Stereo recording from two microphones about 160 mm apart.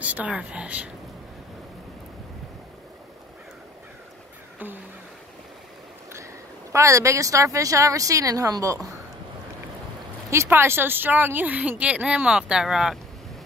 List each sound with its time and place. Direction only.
0.0 s a woman's voice: 10° right (ahead or behind)
6.7 s speech: 20° right (ahead or behind)
10.3 s a woman's voice: 15° right (ahead or behind)